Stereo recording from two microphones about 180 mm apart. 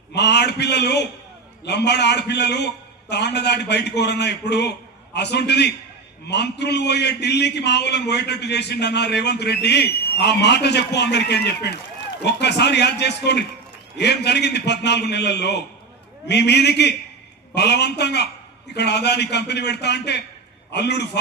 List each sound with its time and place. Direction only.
0.1 s a man's voice: 70° left (ahead or behind)